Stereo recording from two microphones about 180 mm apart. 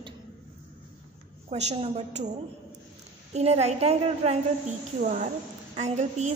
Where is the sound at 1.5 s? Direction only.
40° right (ahead or behind).